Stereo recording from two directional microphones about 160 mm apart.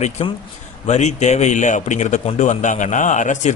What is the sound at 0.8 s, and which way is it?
Speech, 45° left (ahead or behind).